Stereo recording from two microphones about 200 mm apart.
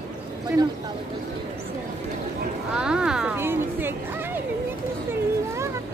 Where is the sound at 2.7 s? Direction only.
5° right (ahead or behind).